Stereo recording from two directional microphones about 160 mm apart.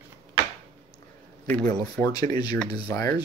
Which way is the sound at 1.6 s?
25° left (ahead or behind).